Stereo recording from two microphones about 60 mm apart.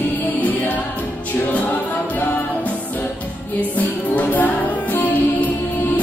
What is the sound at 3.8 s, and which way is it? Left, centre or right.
Music, left.